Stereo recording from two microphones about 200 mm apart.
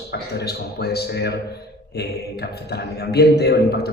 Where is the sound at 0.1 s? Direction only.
55° left (ahead or behind).